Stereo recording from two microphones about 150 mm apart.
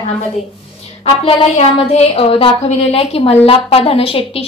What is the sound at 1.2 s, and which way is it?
A woman's voice, 40° left (ahead or behind).